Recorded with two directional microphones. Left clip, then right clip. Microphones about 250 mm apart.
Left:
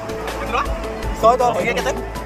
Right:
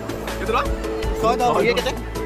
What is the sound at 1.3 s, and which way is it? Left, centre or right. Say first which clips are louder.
Speech: left 3 dB; right.